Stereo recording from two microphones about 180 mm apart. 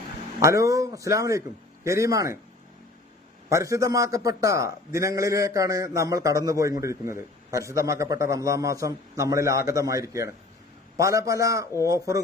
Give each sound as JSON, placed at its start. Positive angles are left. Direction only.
{"t": 0.3, "sound": "a man's voice", "side_deg": -15}
{"t": 3.5, "sound": "a man's voice", "side_deg": -15}